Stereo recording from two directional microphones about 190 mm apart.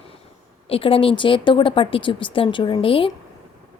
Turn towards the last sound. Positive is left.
turn(degrees=30)  # may be behind; listen again after turning